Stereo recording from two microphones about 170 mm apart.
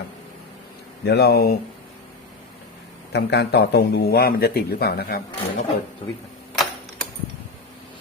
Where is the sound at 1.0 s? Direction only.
75° left (ahead or behind).